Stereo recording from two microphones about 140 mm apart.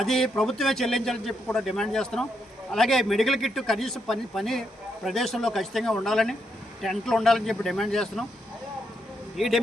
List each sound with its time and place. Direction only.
0.0 s a man's voice: 5° left (ahead or behind)
9.4 s a man's voice: centre (ahead or behind)